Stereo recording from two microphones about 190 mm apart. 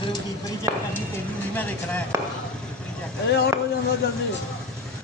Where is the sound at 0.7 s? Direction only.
15° right (ahead or behind).